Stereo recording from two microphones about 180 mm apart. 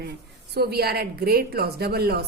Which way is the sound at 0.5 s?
60° right (ahead or behind).